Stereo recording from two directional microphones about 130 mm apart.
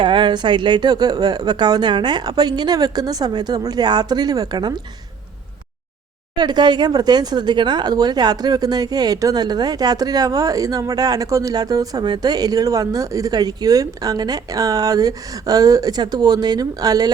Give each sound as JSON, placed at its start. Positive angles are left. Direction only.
{"t": 0.0, "sound": "speech", "side_deg": -40}
{"t": 6.3, "sound": "speech", "side_deg": -35}